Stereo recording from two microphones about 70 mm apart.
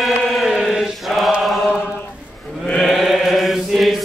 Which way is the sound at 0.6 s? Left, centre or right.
Centre.